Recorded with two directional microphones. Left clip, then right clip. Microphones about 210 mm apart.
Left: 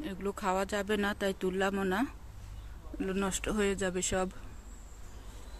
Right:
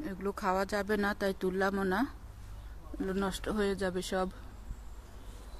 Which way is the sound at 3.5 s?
25° left (ahead or behind).